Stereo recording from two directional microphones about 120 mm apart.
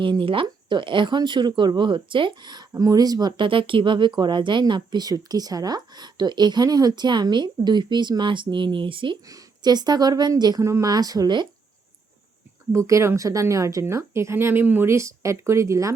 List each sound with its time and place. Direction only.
0.0 s speech: 45° right (ahead or behind)
9.2 s speech: 30° right (ahead or behind)
10.6 s speech: 25° right (ahead or behind)
12.7 s a woman's voice: 25° right (ahead or behind)